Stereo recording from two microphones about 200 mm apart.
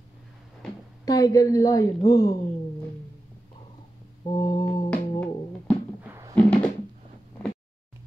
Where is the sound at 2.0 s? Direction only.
15° left (ahead or behind).